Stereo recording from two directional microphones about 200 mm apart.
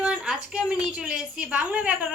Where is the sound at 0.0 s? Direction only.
5° right (ahead or behind).